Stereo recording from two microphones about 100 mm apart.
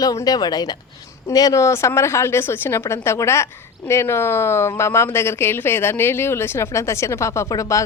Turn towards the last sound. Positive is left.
turn(degrees=35)  # may be behind; listen again after turning